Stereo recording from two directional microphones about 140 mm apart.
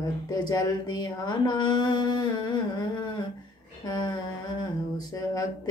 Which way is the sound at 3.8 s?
30° left (ahead or behind).